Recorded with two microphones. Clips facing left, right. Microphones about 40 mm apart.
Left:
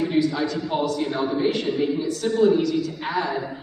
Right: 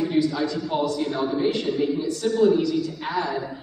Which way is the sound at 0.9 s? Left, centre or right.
Centre.